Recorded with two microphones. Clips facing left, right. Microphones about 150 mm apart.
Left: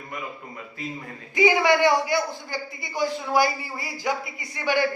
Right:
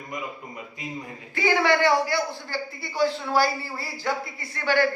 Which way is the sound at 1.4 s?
15° left (ahead or behind).